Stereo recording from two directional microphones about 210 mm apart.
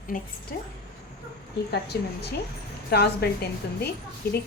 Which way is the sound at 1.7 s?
50° left (ahead or behind).